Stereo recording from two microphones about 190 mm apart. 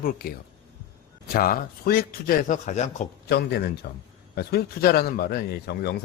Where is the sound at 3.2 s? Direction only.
60° left (ahead or behind).